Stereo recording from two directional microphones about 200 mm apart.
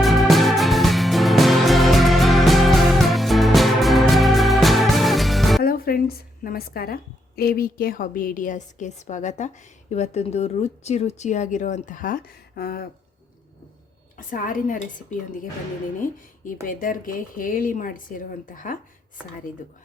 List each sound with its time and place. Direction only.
0.0 s music: centre (ahead or behind)
5.6 s music: 45° left (ahead or behind)
6.4 s a woman's voice: 45° left (ahead or behind)
14.2 s speech: 45° left (ahead or behind)
16.6 s speech: 45° left (ahead or behind)